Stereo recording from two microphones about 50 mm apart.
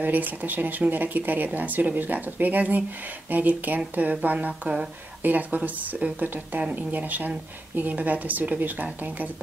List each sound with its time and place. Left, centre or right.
0.0 s speech: right